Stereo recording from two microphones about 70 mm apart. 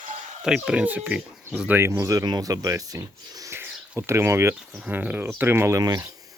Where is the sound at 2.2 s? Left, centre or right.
Right.